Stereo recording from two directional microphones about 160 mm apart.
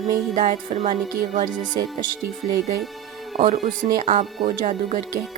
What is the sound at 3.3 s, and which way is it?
A woman's voice, 50° right (ahead or behind).